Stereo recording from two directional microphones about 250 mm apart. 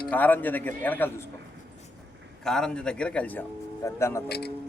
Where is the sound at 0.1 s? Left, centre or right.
Centre.